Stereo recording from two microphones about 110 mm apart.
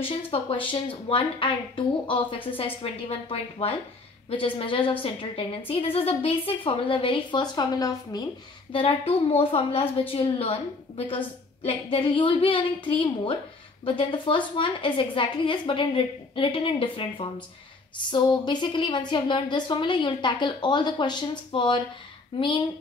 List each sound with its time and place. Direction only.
0.0 s a woman's voice: 55° left (ahead or behind); by 8.3 s 35° left (ahead or behind)
8.7 s a woman's voice: 60° left (ahead or behind)